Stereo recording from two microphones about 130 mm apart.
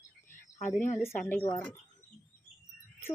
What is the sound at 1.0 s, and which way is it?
Speech, 15° left (ahead or behind).